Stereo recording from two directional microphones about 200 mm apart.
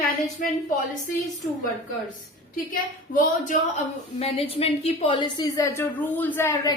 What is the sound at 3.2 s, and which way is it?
A woman's voice, 40° left (ahead or behind).